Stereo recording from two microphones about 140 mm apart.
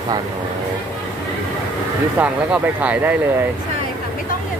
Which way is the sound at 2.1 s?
10° right (ahead or behind).